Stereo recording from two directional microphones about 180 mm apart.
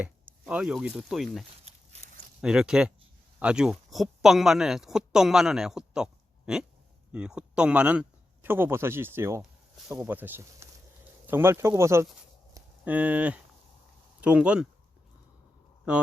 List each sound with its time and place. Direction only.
0.0 s speech: 5° right (ahead or behind)